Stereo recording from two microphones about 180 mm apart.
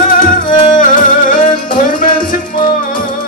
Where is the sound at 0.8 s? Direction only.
45° left (ahead or behind).